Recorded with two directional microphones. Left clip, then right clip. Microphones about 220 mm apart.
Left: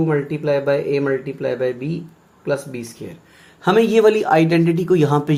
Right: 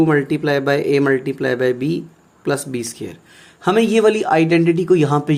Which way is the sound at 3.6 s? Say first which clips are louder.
Left 1 dB; 10° right (ahead or behind).